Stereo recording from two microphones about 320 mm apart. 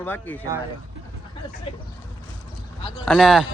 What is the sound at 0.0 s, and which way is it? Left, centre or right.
Speech, centre.